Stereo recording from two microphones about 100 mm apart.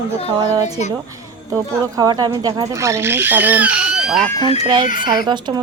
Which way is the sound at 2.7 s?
30° right (ahead or behind).